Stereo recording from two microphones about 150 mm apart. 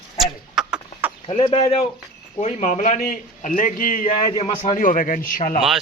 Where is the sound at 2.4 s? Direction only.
60° left (ahead or behind).